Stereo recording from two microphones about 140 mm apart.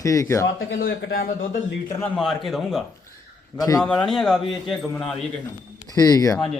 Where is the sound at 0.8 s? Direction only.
90° left.